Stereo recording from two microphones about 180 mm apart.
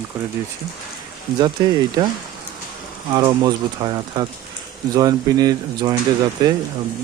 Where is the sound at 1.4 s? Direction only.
25° right (ahead or behind).